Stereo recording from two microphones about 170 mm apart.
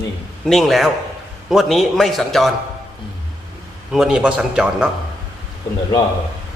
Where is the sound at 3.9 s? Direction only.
5° right (ahead or behind).